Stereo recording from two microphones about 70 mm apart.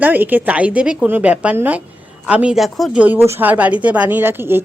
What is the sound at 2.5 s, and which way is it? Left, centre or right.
Speech, centre.